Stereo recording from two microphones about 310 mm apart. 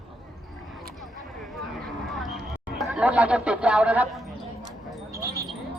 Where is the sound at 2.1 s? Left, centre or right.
Centre.